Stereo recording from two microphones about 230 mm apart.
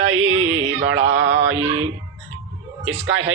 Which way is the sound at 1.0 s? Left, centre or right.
Right.